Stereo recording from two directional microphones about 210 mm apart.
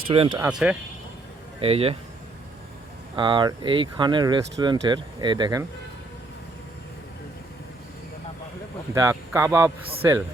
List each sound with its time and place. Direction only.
0.1 s speech: 25° right (ahead or behind)
0.3 s speech: 5° right (ahead or behind)
1.5 s speech: 30° right (ahead or behind)
3.2 s speech: 20° right (ahead or behind)
9.0 s speech: 15° right (ahead or behind)